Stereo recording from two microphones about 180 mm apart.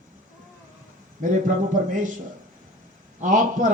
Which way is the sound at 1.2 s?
50° right (ahead or behind).